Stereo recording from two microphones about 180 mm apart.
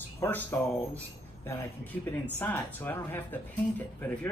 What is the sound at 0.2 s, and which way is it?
Speech, 10° left (ahead or behind).